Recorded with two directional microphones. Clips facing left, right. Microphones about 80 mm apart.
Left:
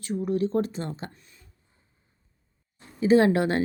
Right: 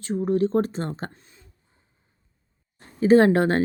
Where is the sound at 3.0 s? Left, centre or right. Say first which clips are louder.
Right 3 dB; right.